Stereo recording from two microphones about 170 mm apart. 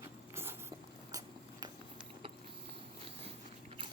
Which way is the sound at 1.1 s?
25° right (ahead or behind).